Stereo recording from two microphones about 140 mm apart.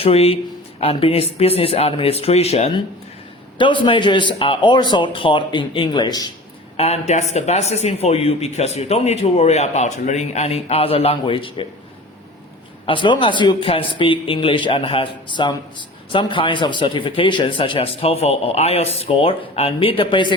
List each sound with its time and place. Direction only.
0.0 s a man's voice: 45° left (ahead or behind)
6.7 s speech: 50° left (ahead or behind)
12.8 s a man's voice: 35° left (ahead or behind)